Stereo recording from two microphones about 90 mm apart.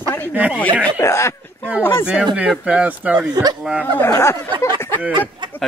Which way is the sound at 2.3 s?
10° right (ahead or behind).